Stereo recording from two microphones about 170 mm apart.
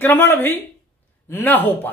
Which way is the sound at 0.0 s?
10° left (ahead or behind).